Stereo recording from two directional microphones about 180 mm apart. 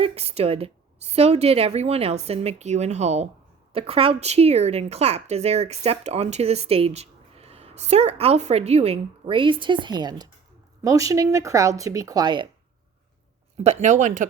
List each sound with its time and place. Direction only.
0.0 s a woman's voice: 30° right (ahead or behind)
13.6 s speech: 40° right (ahead or behind)